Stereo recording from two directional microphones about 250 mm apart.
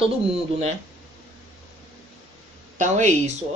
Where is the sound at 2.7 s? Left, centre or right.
Right.